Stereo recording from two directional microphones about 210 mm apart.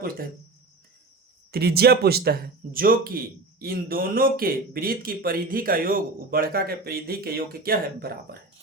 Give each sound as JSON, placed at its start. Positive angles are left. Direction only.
{"t": 1.5, "sound": "speech", "side_deg": -45}